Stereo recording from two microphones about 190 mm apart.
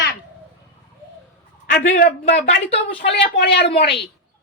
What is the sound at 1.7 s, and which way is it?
Speech, 45° left (ahead or behind).